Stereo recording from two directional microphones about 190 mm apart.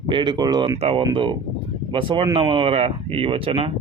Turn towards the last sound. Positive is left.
turn(degrees=-30)  # may be behind; listen again after turning